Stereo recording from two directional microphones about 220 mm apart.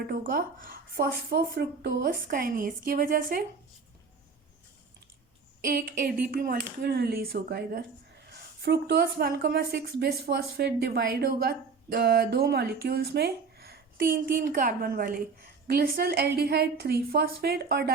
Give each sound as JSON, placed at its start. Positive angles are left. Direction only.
{"t": 0.1, "sound": "speech", "side_deg": -40}
{"t": 5.6, "sound": "a woman's voice", "side_deg": -40}